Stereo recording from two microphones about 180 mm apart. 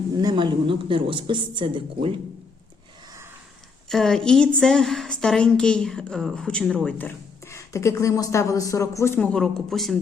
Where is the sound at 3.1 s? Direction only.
15° right (ahead or behind).